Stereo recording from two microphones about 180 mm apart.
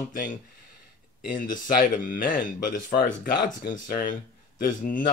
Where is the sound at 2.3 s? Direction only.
50° left (ahead or behind).